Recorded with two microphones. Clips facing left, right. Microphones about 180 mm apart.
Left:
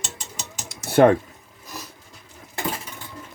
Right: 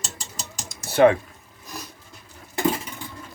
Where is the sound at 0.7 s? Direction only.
50° left (ahead or behind).